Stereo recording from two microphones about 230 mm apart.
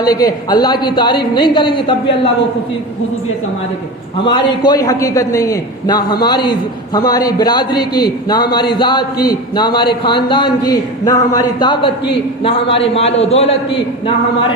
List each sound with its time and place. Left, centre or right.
0.0 s a man's voice: centre
4.2 s a man's voice: centre